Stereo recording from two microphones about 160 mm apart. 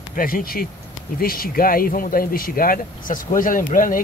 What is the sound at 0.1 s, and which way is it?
Speech, 60° left (ahead or behind).